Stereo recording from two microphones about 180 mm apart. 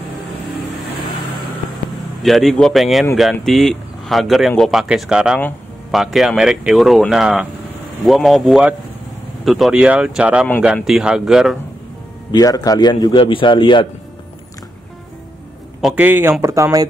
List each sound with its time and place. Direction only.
2.2 s speech: centre (ahead or behind)
12.3 s a man's voice: 20° left (ahead or behind)
15.8 s speech: 10° right (ahead or behind)